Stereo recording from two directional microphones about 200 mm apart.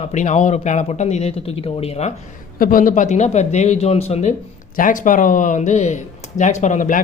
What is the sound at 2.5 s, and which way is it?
Speech, 45° left (ahead or behind).